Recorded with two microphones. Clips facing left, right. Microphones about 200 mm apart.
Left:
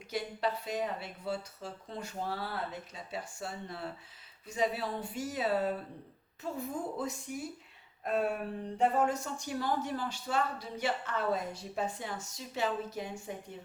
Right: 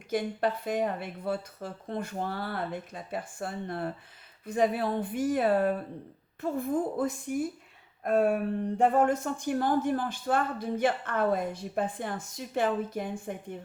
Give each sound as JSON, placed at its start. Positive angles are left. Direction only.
{"t": 0.1, "sound": "a man's voice", "side_deg": -50}